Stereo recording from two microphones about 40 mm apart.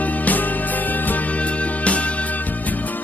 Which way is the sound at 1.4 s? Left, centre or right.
Left.